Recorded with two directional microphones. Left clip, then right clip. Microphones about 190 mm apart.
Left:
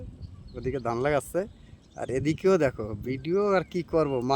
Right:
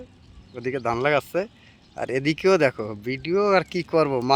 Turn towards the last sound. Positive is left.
turn(degrees=5)  # may be behind; listen again after turning